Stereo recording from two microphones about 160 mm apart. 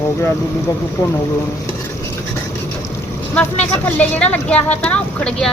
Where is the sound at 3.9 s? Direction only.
10° left (ahead or behind).